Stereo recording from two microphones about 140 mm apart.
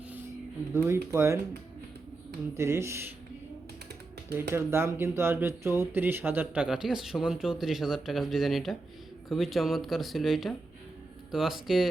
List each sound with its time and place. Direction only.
0.7 s speech: 20° right (ahead or behind)
2.6 s speech: 20° right (ahead or behind)
4.3 s speech: 15° right (ahead or behind); by 11.9 s centre (ahead or behind)